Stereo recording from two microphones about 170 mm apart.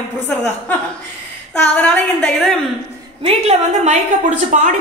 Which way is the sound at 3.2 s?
40° right (ahead or behind).